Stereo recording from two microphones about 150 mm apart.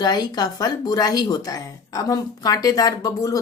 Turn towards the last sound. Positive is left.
turn(degrees=25)  # may be behind; listen again after turning